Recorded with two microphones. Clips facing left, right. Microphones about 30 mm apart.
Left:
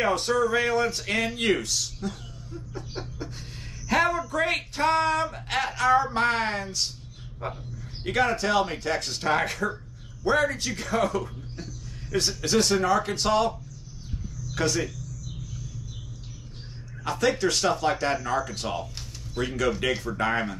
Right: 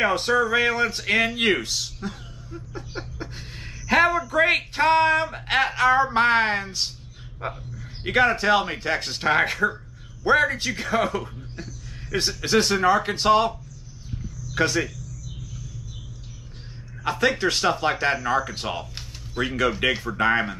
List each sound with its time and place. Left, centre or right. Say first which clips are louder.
0.0 s speech: right 3 dB; right
11.5 s a sound: right 2 dB; centre
12.2 s a man's voice: right 2 dB; right
17.0 s speech: right 2 dB; right